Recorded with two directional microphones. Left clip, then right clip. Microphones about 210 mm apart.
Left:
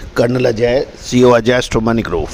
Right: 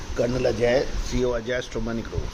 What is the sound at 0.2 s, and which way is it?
Speech, 50° left (ahead or behind).